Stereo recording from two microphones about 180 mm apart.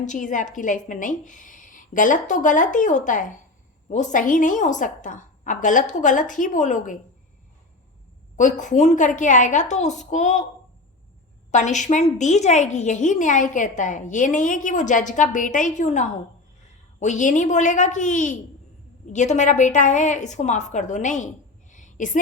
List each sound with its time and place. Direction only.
0.0 s a woman's voice: 45° left (ahead or behind)
8.4 s a woman's voice: 45° left (ahead or behind)
11.5 s a woman's voice: 40° left (ahead or behind)
21.7 s a sound: 45° left (ahead or behind)